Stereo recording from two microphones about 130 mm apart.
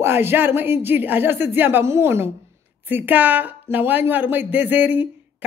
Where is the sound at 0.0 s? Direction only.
20° right (ahead or behind).